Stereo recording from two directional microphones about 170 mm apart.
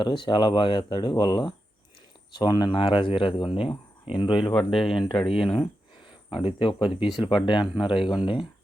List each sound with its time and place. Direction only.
0.0 s speech: 30° left (ahead or behind)
4.5 s speech: centre (ahead or behind)
6.3 s speech: 30° left (ahead or behind)